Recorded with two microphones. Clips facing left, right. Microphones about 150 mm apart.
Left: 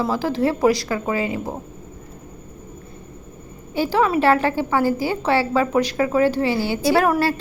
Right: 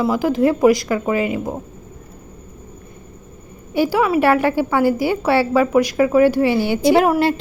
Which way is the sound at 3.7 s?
10° right (ahead or behind).